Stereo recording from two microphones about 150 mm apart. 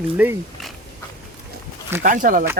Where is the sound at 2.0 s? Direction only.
60° right (ahead or behind).